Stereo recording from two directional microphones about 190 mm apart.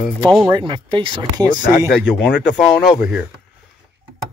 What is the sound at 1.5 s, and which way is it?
Speech, 45° left (ahead or behind).